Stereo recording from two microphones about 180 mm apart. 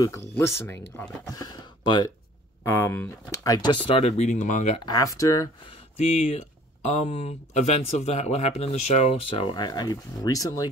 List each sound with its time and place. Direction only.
0.0 s speech: 15° left (ahead or behind)
0.9 s speech: centre (ahead or behind)
1.3 s a sound: 20° left (ahead or behind)
2.6 s speech: 15° left (ahead or behind); by 4.8 s 40° left (ahead or behind)
4.8 s speech: 20° left (ahead or behind)
5.9 s speech: 35° left (ahead or behind); by 10.7 s 20° left (ahead or behind)